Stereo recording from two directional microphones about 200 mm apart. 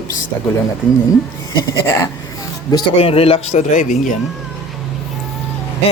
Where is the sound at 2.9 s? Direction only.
30° left (ahead or behind).